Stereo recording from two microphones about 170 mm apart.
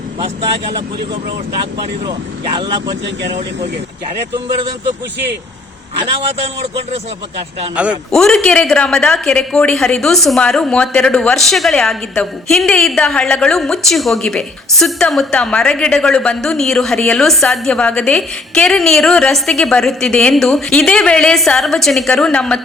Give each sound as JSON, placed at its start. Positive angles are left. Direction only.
{"t": 0.2, "sound": "speech", "side_deg": -35}
{"t": 6.9, "sound": "speech", "side_deg": -35}
{"t": 7.8, "sound": "a woman's voice", "side_deg": 0}